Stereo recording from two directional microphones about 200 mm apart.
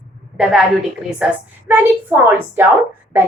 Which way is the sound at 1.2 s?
10° right (ahead or behind).